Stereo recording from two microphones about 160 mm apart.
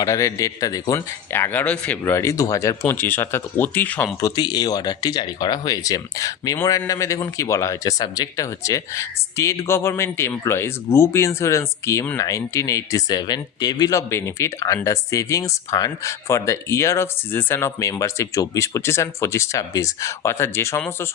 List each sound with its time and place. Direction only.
0.0 s speech: 20° left (ahead or behind)
4.2 s speech: 25° left (ahead or behind)